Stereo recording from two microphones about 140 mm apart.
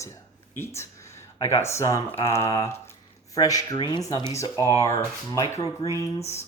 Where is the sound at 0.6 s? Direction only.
20° left (ahead or behind).